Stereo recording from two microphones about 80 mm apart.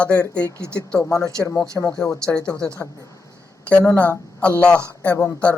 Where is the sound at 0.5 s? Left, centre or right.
Right.